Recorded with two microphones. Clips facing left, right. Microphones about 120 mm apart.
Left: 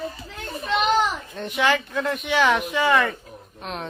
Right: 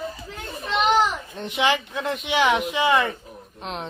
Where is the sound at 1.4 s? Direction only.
20° right (ahead or behind).